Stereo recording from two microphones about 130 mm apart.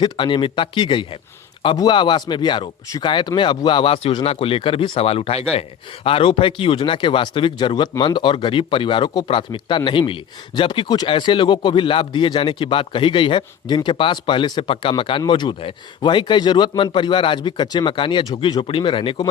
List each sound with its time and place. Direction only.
0.0 s speech: 40° left (ahead or behind)